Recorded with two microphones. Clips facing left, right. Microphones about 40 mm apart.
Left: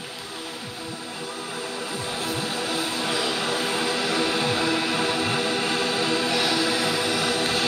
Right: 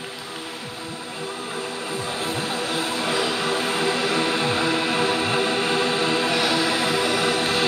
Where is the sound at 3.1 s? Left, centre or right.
Centre.